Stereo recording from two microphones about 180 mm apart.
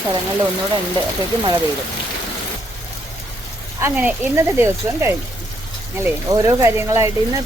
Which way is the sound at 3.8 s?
10° right (ahead or behind).